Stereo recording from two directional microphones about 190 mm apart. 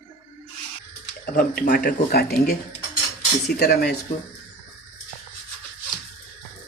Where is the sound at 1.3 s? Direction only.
50° left (ahead or behind).